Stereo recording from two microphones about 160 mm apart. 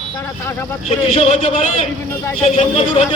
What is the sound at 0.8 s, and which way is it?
A man's voice, 40° left (ahead or behind).